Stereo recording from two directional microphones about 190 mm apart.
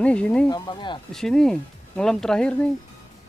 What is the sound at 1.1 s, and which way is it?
Speech, 5° left (ahead or behind).